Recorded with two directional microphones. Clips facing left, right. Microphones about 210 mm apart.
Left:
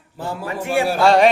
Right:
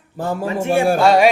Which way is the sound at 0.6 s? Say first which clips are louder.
Right 3 dB; 25° right (ahead or behind).